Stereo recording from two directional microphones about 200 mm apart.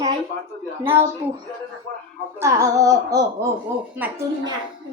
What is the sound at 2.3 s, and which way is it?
A child's voice, 15° right (ahead or behind).